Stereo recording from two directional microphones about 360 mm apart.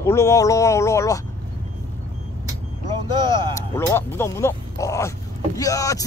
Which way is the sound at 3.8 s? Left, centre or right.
Centre.